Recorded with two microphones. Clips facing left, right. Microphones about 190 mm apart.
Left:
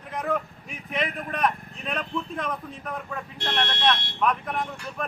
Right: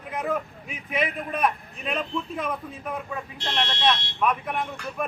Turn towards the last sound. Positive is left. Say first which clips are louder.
# even
turn(degrees=0)  # may be behind; listen again after turning